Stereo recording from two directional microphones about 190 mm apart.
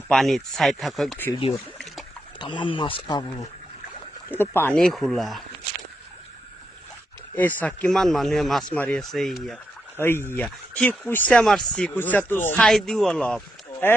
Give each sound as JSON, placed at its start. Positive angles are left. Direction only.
{"t": 0.1, "sound": "speech", "side_deg": 0}
{"t": 2.4, "sound": "speech", "side_deg": 25}
{"t": 4.3, "sound": "speech", "side_deg": 10}
{"t": 7.3, "sound": "speech", "side_deg": 10}